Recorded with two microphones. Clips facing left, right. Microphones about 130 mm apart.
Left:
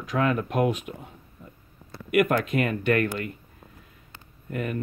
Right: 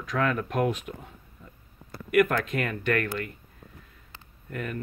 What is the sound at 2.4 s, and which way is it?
Speech, 10° left (ahead or behind).